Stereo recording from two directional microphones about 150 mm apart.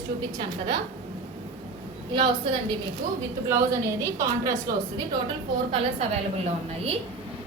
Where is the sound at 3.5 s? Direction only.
20° right (ahead or behind).